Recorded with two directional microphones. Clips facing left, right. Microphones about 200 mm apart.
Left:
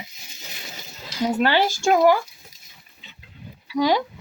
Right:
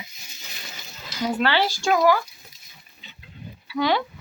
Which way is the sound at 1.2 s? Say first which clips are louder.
Left 2 dB; 15° left (ahead or behind).